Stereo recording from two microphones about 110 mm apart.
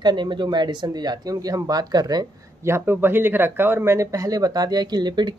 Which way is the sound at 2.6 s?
20° right (ahead or behind).